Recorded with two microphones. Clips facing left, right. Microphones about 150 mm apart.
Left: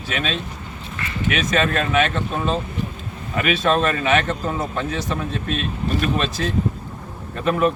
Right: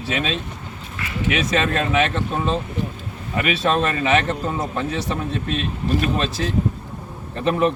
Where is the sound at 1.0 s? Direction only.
10° right (ahead or behind).